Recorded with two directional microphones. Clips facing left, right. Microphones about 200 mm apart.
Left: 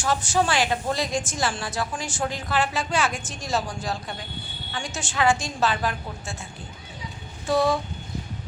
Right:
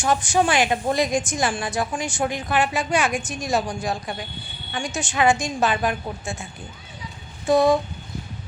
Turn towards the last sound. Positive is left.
turn(degrees=-20)  # may be behind; listen again after turning